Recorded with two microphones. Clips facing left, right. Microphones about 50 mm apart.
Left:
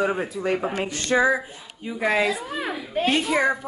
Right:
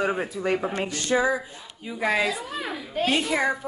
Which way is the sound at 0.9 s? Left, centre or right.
Left.